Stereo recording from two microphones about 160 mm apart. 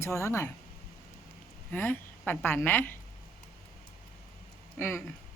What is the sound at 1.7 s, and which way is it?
A woman's voice, 10° left (ahead or behind).